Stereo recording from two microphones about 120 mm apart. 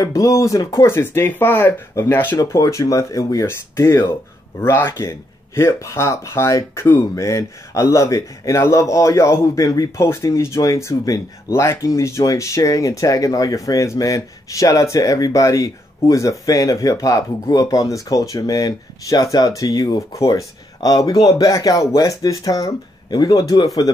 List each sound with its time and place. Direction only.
0.0 s speech: 25° left (ahead or behind)